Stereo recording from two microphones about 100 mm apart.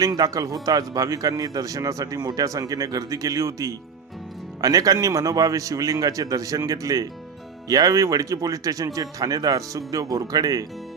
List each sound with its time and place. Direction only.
0.0 s speech: 40° right (ahead or behind)